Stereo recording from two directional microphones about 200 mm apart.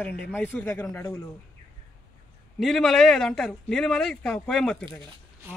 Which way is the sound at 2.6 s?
Centre (ahead or behind).